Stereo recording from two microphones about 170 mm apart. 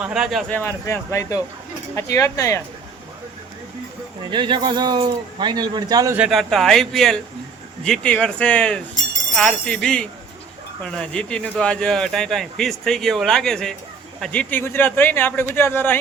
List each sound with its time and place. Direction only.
0.0 s speech: 5° right (ahead or behind)
0.6 s a man's voice: 15° left (ahead or behind)
4.2 s speech: 30° right (ahead or behind)
6.1 s a man's voice: centre (ahead or behind)